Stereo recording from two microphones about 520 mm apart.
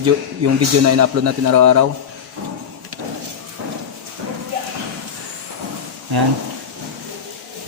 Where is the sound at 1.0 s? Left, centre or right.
Right.